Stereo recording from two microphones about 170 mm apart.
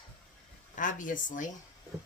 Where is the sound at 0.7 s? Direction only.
50° left (ahead or behind).